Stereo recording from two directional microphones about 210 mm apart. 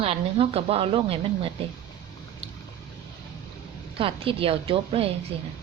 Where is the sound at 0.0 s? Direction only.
30° right (ahead or behind).